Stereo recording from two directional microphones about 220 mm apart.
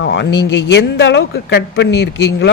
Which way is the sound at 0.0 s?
55° left (ahead or behind).